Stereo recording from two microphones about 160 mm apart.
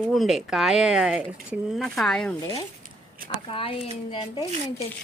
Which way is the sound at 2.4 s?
20° left (ahead or behind).